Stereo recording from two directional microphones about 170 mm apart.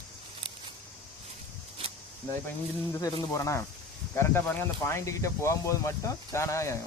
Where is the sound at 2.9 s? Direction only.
20° left (ahead or behind).